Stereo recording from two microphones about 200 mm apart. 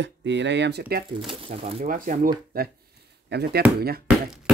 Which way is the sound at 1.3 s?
30° right (ahead or behind).